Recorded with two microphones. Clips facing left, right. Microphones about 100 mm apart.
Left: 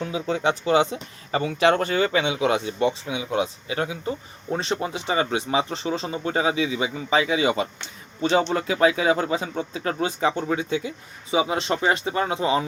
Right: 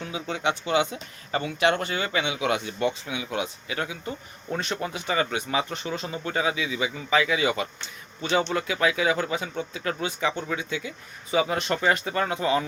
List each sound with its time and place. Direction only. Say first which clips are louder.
0.0 s speech: left 4 dB; 35° left (ahead or behind)